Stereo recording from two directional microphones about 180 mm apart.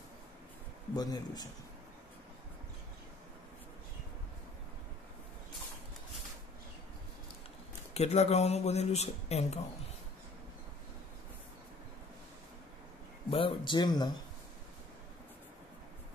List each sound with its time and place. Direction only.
0.9 s speech: 20° left (ahead or behind)
7.9 s speech: 35° left (ahead or behind)
13.3 s speech: 30° left (ahead or behind)